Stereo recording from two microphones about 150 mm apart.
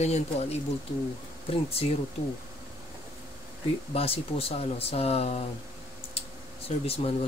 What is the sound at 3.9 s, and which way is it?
Speech, 40° left (ahead or behind).